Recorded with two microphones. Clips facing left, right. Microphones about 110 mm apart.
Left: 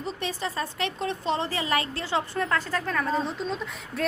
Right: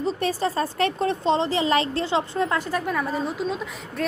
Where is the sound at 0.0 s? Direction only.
40° right (ahead or behind).